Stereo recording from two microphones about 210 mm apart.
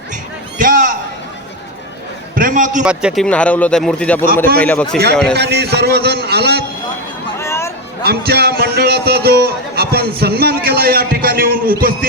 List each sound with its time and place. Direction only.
0.6 s a sound: 40° right (ahead or behind)
2.3 s a sound: 40° right (ahead or behind)
2.8 s speech: 5° right (ahead or behind)
5.3 s a man's voice: 50° right (ahead or behind)
7.3 s hubbub: 15° left (ahead or behind)
8.0 s a man's voice: 50° right (ahead or behind)